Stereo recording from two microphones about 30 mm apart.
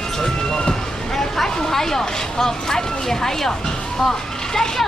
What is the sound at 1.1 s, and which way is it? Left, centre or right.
Vehicle, centre.